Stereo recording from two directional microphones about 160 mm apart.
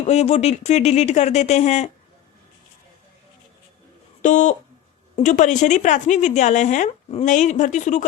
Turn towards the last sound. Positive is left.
turn(degrees=50)  # may be behind; listen again after turning